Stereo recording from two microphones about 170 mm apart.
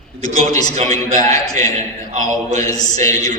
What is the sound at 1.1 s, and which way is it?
A man's voice, 45° right (ahead or behind).